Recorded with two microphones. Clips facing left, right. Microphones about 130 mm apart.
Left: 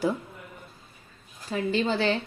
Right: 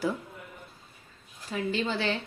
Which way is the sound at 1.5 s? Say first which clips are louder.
Left 4 dB; 35° left (ahead or behind).